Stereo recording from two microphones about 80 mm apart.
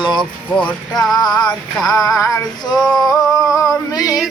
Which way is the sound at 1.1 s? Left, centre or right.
Left.